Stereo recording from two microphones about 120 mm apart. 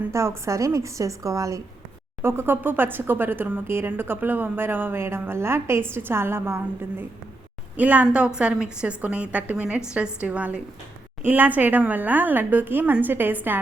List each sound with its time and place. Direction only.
0.1 s a woman's voice: 25° right (ahead or behind)
7.8 s speech: 10° right (ahead or behind)